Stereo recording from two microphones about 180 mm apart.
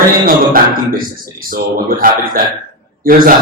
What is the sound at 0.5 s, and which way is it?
A man's voice, 55° right (ahead or behind).